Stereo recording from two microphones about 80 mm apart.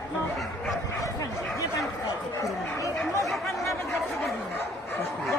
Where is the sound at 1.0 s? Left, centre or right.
Left.